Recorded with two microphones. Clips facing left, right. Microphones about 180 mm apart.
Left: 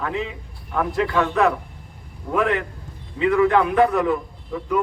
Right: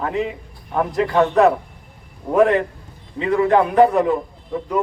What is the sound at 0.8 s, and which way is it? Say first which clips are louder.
Speech: right 2 dB; 25° right (ahead or behind).